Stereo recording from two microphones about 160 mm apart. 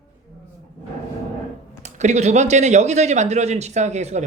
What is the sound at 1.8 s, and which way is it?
Speech, 45° right (ahead or behind).